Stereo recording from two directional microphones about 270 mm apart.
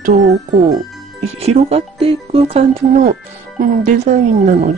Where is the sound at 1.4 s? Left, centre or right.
Right.